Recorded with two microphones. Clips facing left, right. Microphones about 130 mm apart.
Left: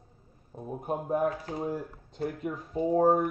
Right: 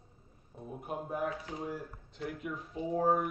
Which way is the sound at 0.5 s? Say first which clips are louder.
Left 7 dB; 35° left (ahead or behind).